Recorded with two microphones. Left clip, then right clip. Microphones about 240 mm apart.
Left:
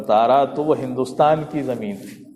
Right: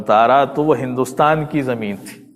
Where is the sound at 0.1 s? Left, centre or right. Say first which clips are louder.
Right 3 dB; right.